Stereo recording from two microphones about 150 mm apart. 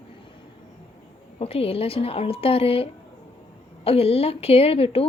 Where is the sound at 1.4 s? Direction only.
40° left (ahead or behind).